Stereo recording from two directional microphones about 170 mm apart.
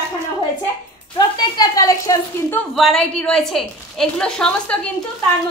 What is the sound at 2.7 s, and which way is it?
A woman's voice, centre (ahead or behind).